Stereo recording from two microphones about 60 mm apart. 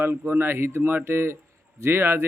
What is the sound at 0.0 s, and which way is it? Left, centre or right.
A man's voice, right.